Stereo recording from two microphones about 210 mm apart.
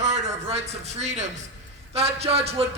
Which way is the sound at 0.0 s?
35° right (ahead or behind).